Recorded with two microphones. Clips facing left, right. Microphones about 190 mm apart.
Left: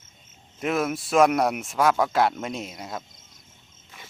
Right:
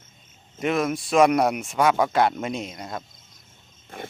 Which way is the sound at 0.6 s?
5° left (ahead or behind).